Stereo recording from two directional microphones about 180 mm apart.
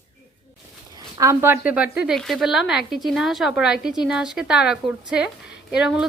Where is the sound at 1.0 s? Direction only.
20° right (ahead or behind).